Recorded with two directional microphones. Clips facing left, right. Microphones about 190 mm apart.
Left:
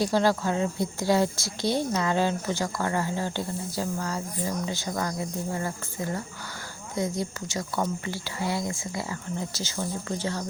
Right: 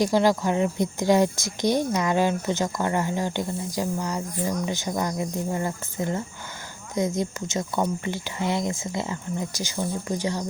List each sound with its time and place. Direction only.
0.0 s speech: 15° right (ahead or behind)